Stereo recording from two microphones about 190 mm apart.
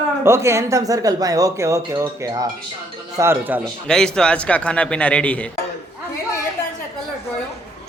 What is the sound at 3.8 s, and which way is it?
A man's voice, 5° left (ahead or behind).